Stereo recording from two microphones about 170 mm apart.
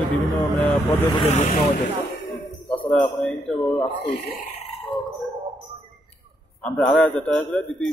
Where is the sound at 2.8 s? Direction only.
5° left (ahead or behind).